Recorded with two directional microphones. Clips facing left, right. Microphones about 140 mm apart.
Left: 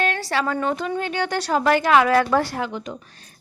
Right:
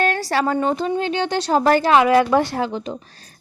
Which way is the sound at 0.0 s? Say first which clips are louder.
Right 3 dB; 40° right (ahead or behind).